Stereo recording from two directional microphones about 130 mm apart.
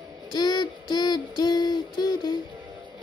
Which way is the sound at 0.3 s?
30° left (ahead or behind).